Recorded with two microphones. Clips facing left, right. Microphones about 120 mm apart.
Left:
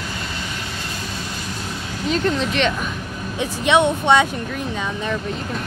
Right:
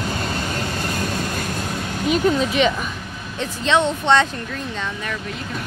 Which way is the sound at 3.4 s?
15° left (ahead or behind).